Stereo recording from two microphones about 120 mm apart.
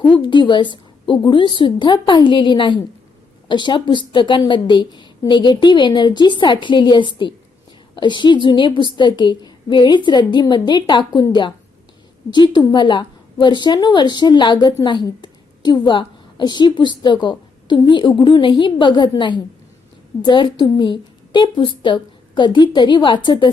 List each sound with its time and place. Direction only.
0.0 s a woman's voice: 40° left (ahead or behind)